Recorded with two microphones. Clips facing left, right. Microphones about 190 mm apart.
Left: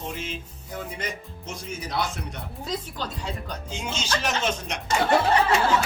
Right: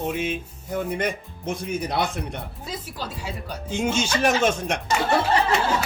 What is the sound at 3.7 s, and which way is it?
Speech, 55° right (ahead or behind).